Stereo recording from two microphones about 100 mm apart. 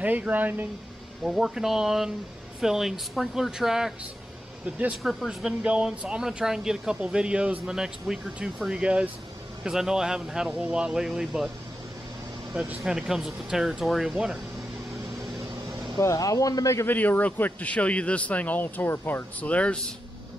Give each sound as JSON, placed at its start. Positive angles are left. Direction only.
{"t": 0.0, "sound": "speech", "side_deg": -15}
{"t": 1.2, "sound": "speech", "side_deg": -5}
{"t": 5.0, "sound": "speech", "side_deg": 0}
{"t": 12.8, "sound": "speech", "side_deg": -5}
{"t": 16.0, "sound": "speech", "side_deg": 35}
{"t": 16.8, "sound": "a man's voice", "side_deg": 20}